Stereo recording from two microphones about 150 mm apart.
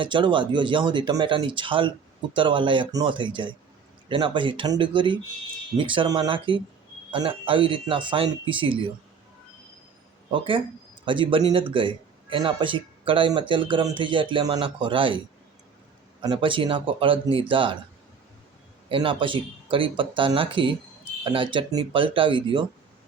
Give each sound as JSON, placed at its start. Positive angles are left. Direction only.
{"t": 0.0, "sound": "speech", "side_deg": -35}
{"t": 10.3, "sound": "speech", "side_deg": -35}
{"t": 16.2, "sound": "speech", "side_deg": -35}
{"t": 18.9, "sound": "speech", "side_deg": -35}